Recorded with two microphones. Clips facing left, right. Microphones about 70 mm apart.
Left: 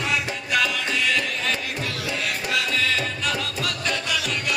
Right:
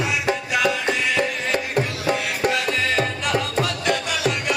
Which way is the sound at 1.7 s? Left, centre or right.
Right.